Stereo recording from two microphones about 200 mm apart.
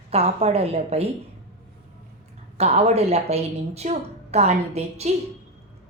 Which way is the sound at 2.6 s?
30° right (ahead or behind).